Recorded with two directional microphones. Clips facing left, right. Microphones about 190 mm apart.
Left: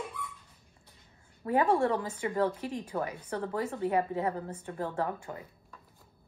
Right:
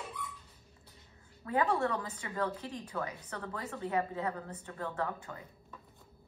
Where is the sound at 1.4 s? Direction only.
25° left (ahead or behind).